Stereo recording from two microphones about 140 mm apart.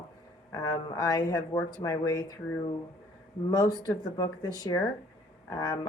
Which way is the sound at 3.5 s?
30° left (ahead or behind).